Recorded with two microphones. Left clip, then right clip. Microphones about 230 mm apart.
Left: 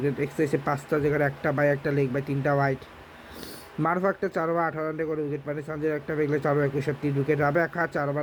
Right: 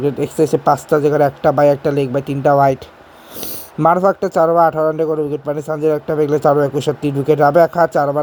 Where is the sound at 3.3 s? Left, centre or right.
Right.